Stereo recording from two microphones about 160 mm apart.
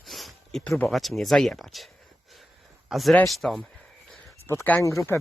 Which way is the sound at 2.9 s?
Centre (ahead or behind).